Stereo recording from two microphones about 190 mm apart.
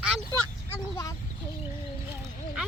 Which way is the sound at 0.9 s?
20° left (ahead or behind).